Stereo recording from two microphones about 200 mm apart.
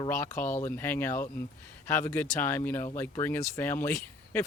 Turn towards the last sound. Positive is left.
turn(degrees=10)  # may be behind; listen again after turning